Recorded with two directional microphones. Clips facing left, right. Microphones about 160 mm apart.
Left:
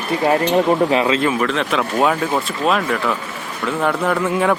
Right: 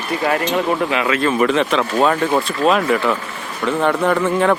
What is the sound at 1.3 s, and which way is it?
Speech, centre (ahead or behind).